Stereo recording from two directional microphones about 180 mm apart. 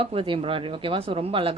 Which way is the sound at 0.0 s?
30° right (ahead or behind).